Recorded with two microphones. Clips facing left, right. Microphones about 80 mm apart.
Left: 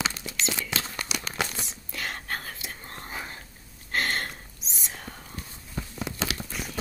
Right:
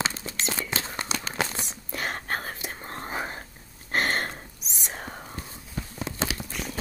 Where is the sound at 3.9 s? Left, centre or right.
Right.